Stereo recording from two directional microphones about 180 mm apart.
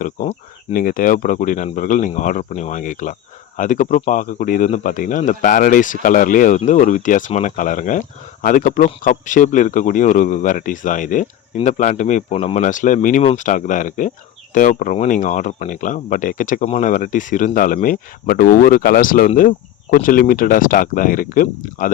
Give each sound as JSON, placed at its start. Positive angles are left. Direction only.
{"t": 0.0, "sound": "speech", "side_deg": 45}